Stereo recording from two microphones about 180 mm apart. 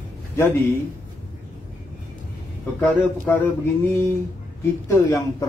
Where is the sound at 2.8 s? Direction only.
10° left (ahead or behind).